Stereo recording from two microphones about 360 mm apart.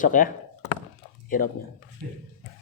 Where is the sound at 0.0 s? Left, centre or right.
Left.